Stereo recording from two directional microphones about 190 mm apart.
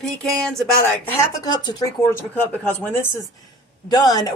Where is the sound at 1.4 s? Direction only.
20° left (ahead or behind).